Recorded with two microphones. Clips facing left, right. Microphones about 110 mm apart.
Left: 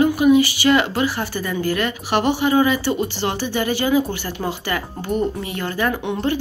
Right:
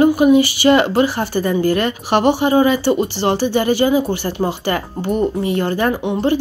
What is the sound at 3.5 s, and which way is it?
A woman's voice, 35° right (ahead or behind).